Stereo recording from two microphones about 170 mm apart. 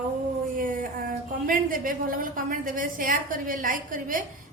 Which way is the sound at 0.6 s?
55° right (ahead or behind).